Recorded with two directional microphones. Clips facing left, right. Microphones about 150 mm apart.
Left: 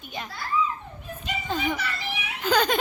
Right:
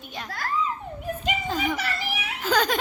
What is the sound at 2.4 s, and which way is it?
Baby laughter, centre (ahead or behind).